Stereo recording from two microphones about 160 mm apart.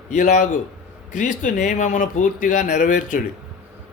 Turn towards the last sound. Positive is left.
turn(degrees=55)  # may be behind; listen again after turning